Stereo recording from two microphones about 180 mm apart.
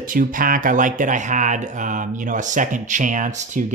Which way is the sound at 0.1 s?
50° right (ahead or behind).